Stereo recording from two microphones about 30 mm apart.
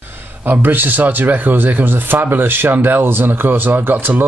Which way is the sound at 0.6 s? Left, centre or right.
Right.